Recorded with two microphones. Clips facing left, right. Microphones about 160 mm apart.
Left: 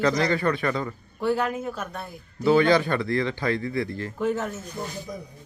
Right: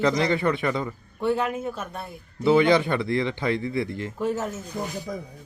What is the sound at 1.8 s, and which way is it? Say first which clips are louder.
Speech: even; 5° right (ahead or behind).